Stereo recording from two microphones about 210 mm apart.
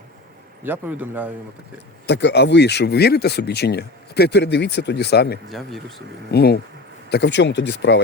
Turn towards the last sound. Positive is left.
turn(degrees=55)  # may be behind; listen again after turning